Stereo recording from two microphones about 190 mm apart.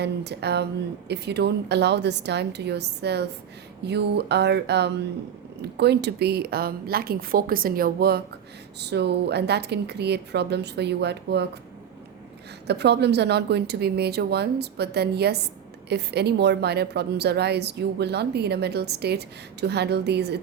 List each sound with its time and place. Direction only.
0.0 s a woman's voice: 60° right (ahead or behind)
12.6 s a woman's voice: 60° right (ahead or behind)